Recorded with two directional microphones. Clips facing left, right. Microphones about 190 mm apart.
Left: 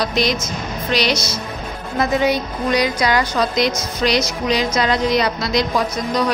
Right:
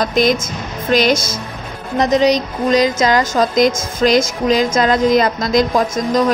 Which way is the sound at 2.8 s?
45° right (ahead or behind).